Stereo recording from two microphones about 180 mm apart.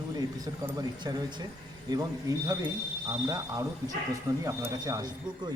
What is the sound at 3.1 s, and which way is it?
A man's voice, 20° right (ahead or behind).